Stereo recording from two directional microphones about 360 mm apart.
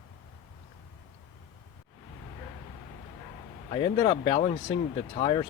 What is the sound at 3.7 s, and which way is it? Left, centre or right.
Speech, centre.